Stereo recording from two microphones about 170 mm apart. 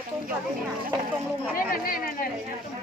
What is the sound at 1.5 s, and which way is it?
Speech, 55° left (ahead or behind).